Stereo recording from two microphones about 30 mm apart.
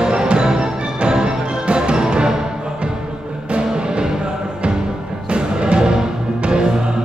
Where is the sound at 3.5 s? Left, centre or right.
Right.